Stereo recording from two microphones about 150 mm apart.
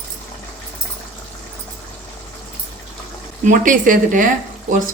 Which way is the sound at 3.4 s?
60° right (ahead or behind).